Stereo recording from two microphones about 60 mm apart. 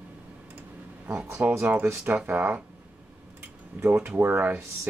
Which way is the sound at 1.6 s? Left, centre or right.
Right.